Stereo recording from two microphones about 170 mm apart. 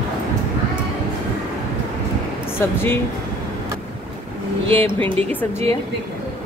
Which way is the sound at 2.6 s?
15° left (ahead or behind).